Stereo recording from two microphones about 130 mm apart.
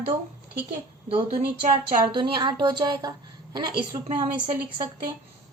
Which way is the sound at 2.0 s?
40° right (ahead or behind).